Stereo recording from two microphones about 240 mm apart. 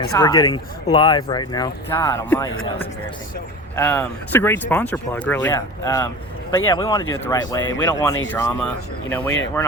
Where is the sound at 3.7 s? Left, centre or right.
Centre.